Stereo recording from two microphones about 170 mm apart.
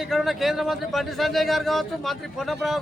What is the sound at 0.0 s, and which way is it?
Speech, centre (ahead or behind).